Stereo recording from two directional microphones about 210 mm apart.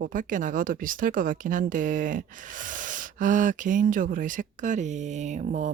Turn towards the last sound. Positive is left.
turn(degrees=-35)  # may be behind; listen again after turning